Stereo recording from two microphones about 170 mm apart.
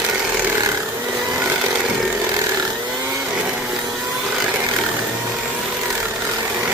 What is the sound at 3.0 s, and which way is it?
Vehicle, 10° right (ahead or behind).